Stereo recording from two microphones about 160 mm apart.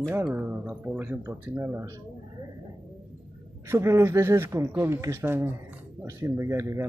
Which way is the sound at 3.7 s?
15° right (ahead or behind).